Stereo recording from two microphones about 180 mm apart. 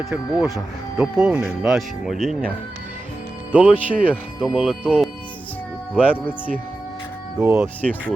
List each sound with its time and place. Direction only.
0.0 s speech: centre (ahead or behind)
3.5 s speech: 5° right (ahead or behind)
7.3 s speech: 15° right (ahead or behind)